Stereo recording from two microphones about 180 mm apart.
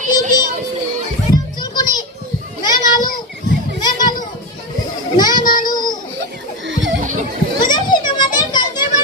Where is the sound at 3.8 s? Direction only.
25° left (ahead or behind).